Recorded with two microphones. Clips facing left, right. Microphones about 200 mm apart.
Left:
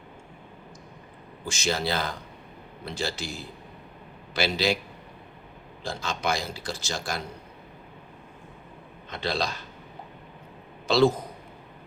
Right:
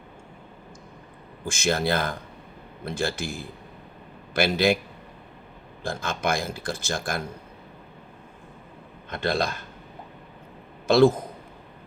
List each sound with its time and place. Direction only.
1.5 s speech: 55° right (ahead or behind)
5.8 s speech: 55° right (ahead or behind)
9.0 s speech: 55° right (ahead or behind)
10.8 s a man's voice: 50° right (ahead or behind)